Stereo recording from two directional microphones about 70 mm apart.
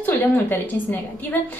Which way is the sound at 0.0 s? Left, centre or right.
Left.